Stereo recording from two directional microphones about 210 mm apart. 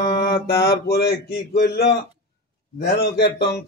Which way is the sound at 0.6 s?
50° left (ahead or behind).